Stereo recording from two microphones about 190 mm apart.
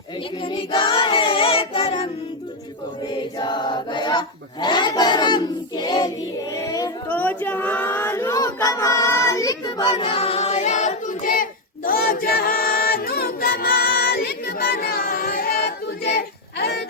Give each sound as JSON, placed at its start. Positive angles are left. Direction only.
{"t": 0.4, "sound": "child singing", "side_deg": 25}
{"t": 3.1, "sound": "choir", "side_deg": 25}
{"t": 11.9, "sound": "music", "side_deg": 50}